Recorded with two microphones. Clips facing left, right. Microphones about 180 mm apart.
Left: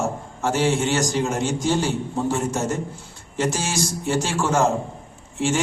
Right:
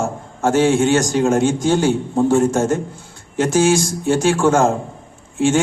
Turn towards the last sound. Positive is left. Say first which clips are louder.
# right 7 dB
turn(degrees=-50)  # may be behind; listen again after turning